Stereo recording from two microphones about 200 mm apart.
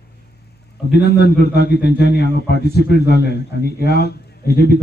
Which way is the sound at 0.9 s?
55° left (ahead or behind).